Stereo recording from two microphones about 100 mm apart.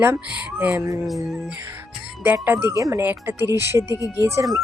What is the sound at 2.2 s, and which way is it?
Speech, 15° right (ahead or behind).